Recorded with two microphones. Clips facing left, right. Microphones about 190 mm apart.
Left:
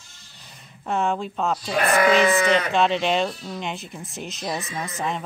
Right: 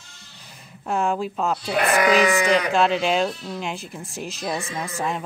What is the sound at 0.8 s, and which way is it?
Speech, centre (ahead or behind).